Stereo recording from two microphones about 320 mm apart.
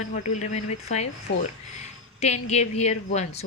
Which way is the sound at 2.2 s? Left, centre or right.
Left.